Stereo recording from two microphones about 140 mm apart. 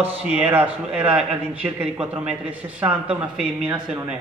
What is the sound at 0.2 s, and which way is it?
A man's voice, 5° right (ahead or behind).